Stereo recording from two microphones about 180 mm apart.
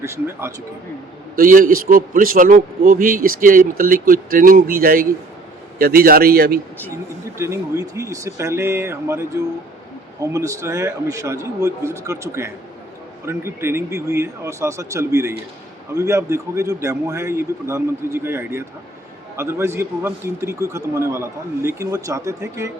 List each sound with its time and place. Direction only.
0.0 s a man's voice: 15° right (ahead or behind)
1.4 s a man's voice: 50° right (ahead or behind)
7.3 s a man's voice: 15° right (ahead or behind)